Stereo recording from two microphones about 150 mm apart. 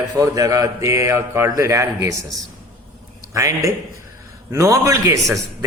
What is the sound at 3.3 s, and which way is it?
A man's voice, 20° right (ahead or behind).